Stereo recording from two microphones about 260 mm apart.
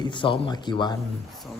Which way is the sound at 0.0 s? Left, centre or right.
Centre.